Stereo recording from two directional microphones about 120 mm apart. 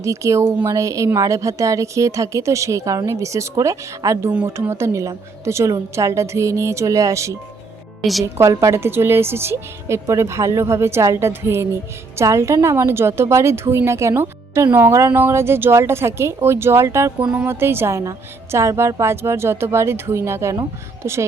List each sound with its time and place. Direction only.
0.0 s a woman's voice: 25° right (ahead or behind)
4.3 s speech: 10° right (ahead or behind)
4.5 s a woman's voice: 20° right (ahead or behind)